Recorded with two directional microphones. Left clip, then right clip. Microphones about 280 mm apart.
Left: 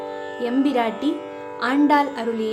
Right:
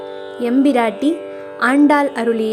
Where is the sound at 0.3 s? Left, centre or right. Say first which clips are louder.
Right 6 dB; right.